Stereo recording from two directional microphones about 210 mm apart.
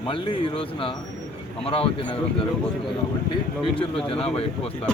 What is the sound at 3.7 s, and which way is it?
Speech, 25° left (ahead or behind).